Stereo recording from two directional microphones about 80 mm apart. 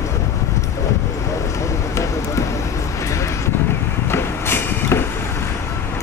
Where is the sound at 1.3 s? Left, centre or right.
Left.